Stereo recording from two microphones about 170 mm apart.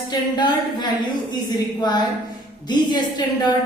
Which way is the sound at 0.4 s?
25° left (ahead or behind).